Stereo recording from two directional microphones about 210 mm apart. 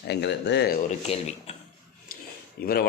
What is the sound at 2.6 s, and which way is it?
Speech, 45° left (ahead or behind).